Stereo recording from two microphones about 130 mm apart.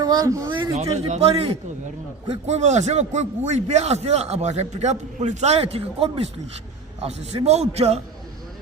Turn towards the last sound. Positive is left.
turn(degrees=-55)  # may be behind; listen again after turning